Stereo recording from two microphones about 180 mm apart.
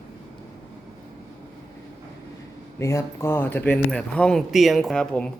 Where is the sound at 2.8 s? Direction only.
15° left (ahead or behind).